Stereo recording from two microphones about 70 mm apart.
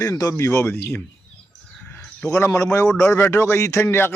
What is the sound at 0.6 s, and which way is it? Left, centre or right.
Speech, left.